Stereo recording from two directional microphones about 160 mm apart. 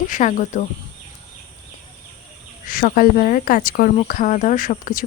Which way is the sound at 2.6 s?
60° left (ahead or behind).